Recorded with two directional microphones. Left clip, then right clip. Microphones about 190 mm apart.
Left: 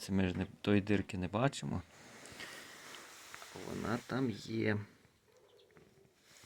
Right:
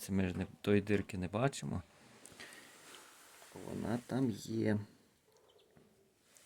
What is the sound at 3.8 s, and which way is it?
Speech, 30° right (ahead or behind).